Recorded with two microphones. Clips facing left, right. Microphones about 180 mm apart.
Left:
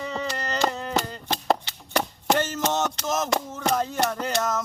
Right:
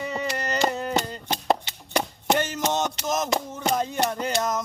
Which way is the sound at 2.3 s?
15° right (ahead or behind).